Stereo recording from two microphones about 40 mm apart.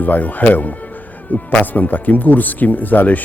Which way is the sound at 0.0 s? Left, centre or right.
Left.